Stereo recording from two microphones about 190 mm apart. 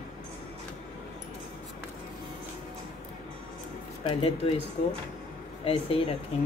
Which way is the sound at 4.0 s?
25° left (ahead or behind).